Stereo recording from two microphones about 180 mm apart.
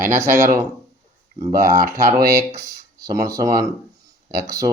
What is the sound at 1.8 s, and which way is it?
Speech, 15° right (ahead or behind).